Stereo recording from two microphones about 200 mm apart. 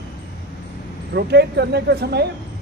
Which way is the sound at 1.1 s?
55° right (ahead or behind).